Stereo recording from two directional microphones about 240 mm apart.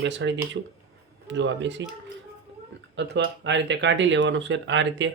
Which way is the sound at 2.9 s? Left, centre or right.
Right.